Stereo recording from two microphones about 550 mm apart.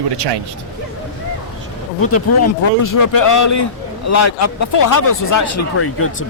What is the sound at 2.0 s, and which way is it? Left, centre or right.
Speech, left.